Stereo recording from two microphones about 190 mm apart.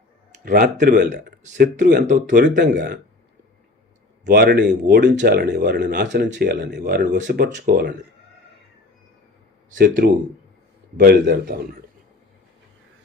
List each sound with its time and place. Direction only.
0.4 s speech: 50° right (ahead or behind)
1.1 s speech: 40° right (ahead or behind)
2.7 s speech: 55° right (ahead or behind)
4.3 s speech: 55° right (ahead or behind)
4.9 s speech: 45° right (ahead or behind)
9.6 s speech: 50° right (ahead or behind)